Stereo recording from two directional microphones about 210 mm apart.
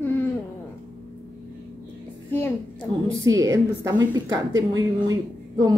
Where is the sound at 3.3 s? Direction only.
15° right (ahead or behind).